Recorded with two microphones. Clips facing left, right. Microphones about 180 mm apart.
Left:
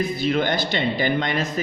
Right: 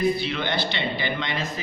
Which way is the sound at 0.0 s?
45° left (ahead or behind).